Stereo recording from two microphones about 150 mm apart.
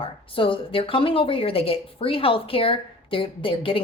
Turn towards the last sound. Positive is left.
turn(degrees=35)  # may be behind; listen again after turning